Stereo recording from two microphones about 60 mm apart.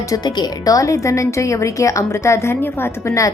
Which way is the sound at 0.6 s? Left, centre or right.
Left.